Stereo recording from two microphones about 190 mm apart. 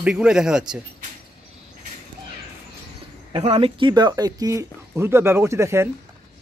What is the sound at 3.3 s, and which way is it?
Speech, 30° right (ahead or behind).